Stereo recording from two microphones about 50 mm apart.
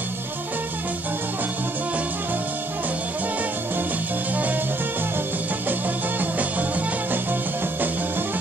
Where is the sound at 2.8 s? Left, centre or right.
Right.